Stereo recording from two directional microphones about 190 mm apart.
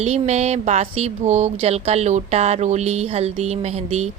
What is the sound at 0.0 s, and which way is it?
Speech, 35° right (ahead or behind).